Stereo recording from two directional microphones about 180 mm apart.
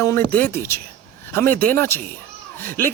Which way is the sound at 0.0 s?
10° left (ahead or behind).